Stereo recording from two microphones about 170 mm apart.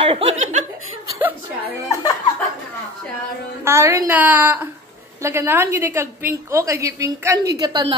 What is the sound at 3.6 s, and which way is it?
A woman's voice, 15° right (ahead or behind).